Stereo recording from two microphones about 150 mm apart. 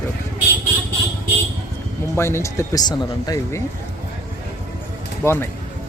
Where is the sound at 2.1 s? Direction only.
15° left (ahead or behind).